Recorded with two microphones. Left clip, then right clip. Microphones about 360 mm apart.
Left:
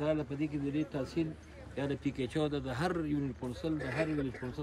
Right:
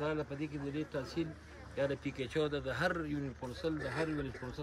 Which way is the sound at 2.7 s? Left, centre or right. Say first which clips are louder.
Left 1 dB; centre.